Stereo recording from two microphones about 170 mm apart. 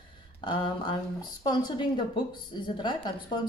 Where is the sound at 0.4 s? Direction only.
30° left (ahead or behind).